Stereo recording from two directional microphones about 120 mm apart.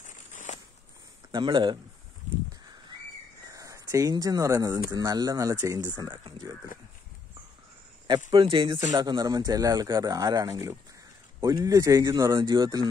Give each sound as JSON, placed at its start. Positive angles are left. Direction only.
{"t": 0.0, "sound": "walk", "side_deg": 90}
{"t": 1.3, "sound": "a man's voice", "side_deg": -40}
{"t": 3.5, "sound": "speech", "side_deg": -25}
{"t": 6.0, "sound": "a man's voice", "side_deg": -40}
{"t": 8.3, "sound": "speech", "side_deg": -45}
{"t": 8.9, "sound": "a man's voice", "side_deg": -35}